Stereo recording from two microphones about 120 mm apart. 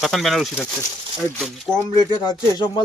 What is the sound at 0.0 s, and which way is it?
Speech, centre (ahead or behind).